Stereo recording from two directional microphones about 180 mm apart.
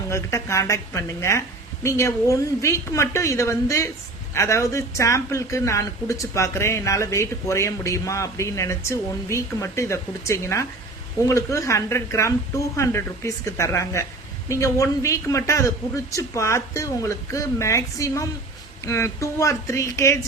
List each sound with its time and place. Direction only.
0.1 s speech: 15° left (ahead or behind)